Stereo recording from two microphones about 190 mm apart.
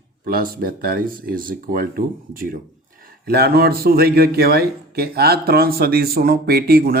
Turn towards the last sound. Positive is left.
turn(degrees=-50)  # may be behind; listen again after turning